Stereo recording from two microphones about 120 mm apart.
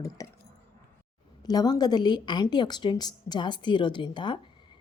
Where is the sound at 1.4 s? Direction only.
35° left (ahead or behind).